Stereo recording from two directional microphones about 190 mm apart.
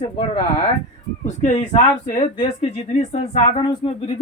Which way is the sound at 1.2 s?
40° left (ahead or behind).